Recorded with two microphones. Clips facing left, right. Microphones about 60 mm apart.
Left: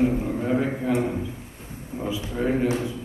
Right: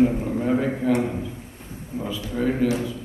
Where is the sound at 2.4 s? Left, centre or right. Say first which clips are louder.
Right 1 dB; left.